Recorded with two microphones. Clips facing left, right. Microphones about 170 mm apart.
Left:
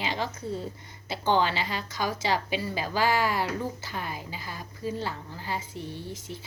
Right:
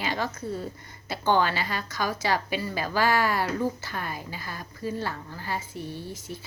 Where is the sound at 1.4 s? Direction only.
50° right (ahead or behind).